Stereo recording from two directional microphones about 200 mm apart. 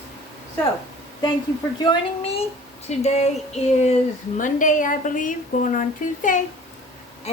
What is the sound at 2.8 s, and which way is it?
Speech, 35° left (ahead or behind).